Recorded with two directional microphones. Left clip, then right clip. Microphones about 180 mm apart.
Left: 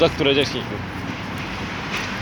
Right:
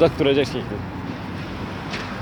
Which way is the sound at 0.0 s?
20° right (ahead or behind).